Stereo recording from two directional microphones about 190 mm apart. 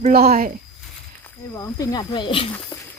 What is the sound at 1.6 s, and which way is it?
Speech, 20° left (ahead or behind).